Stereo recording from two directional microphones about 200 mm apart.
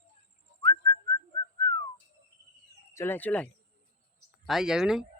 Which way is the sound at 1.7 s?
15° left (ahead or behind).